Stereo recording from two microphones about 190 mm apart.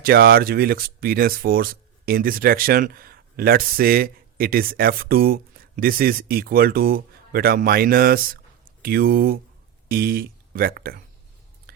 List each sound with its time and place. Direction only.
0.0 s speech: 55° right (ahead or behind)